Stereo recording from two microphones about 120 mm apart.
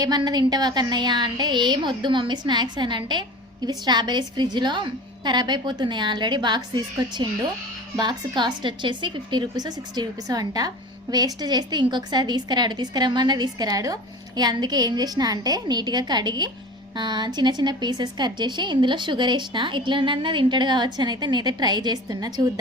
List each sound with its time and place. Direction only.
0.0 s a woman's voice: 35° right (ahead or behind)